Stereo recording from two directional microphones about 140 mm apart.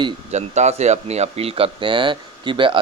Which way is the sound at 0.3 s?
55° right (ahead or behind).